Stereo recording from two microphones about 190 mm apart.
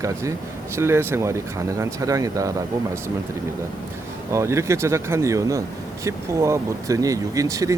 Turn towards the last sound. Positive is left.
turn(degrees=-15)  # may be behind; listen again after turning